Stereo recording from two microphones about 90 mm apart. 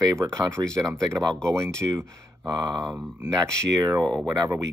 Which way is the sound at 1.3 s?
10° left (ahead or behind).